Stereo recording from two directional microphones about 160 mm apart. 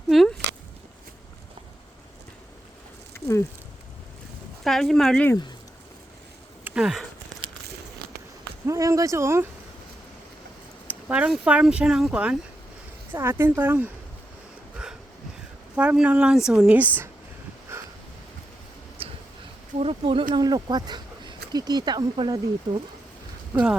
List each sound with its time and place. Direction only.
0.1 s a sound: centre (ahead or behind)
4.6 s a woman's voice: centre (ahead or behind)
6.7 s speech: 5° right (ahead or behind)
8.6 s speech: 20° right (ahead or behind)
10.8 s speech: 10° right (ahead or behind)
15.7 s speech: 5° right (ahead or behind)
19.0 s a sound: 35° right (ahead or behind)
19.8 s speech: 35° right (ahead or behind)